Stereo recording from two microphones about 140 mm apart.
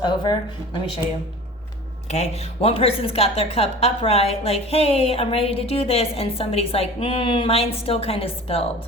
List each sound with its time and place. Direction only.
0.0 s speech: 30° left (ahead or behind)
2.0 s a woman's voice: 55° left (ahead or behind)